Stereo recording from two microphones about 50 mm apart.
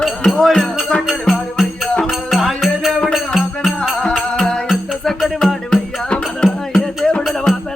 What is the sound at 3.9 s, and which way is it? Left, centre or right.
Music, centre.